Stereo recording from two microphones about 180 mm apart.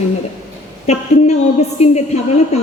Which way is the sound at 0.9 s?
40° left (ahead or behind).